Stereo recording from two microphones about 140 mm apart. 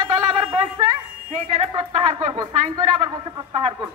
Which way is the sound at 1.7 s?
35° right (ahead or behind).